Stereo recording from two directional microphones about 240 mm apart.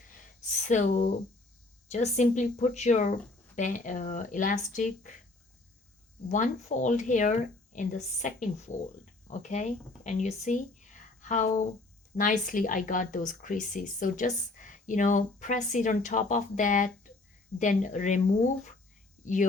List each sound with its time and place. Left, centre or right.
0.7 s a woman's voice: left
6.2 s a woman's voice: left
19.2 s speech: left